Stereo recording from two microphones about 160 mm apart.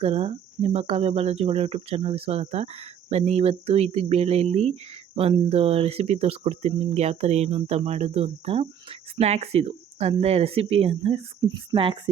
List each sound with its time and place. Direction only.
0.0 s speech: 40° right (ahead or behind)